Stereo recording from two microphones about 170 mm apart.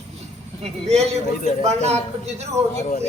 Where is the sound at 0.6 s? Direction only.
40° right (ahead or behind).